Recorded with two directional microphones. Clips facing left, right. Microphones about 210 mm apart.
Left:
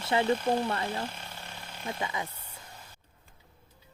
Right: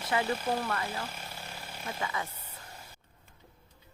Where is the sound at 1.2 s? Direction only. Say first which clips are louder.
Right 1 dB; 5° right (ahead or behind).